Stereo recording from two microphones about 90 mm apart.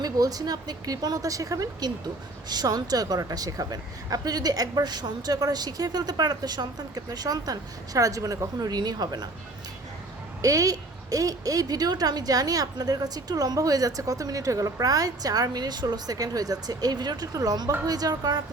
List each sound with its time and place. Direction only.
0.0 s a woman's voice: 45° right (ahead or behind)
10.4 s a woman's voice: 40° right (ahead or behind)